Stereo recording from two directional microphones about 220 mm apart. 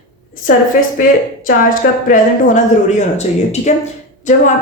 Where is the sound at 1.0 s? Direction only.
40° left (ahead or behind).